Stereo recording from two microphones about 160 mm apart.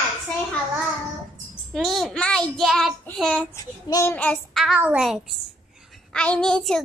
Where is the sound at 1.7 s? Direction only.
Centre (ahead or behind).